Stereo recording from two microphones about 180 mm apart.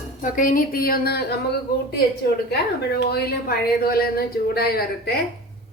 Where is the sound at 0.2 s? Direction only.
50° left (ahead or behind).